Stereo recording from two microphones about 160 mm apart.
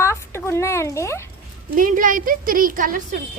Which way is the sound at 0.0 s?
15° left (ahead or behind).